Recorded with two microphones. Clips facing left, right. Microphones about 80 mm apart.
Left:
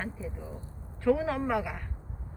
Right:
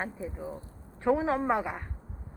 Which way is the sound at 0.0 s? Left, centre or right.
Right.